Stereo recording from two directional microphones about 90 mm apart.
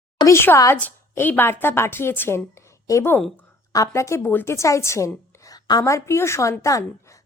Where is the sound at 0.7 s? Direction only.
20° left (ahead or behind).